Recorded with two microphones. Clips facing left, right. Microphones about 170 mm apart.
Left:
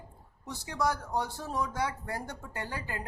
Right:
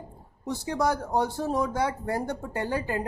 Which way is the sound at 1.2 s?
55° right (ahead or behind).